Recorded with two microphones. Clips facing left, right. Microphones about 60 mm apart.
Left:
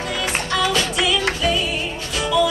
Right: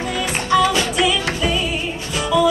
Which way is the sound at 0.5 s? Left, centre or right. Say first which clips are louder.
Right 6 dB; centre.